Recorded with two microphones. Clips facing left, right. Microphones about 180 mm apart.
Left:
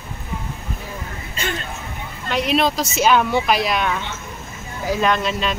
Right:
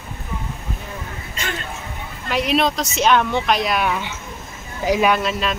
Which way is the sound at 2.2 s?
Centre (ahead or behind).